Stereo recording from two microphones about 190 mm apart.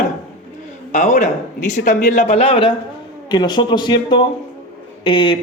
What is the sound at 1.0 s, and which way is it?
A man's voice, 40° left (ahead or behind).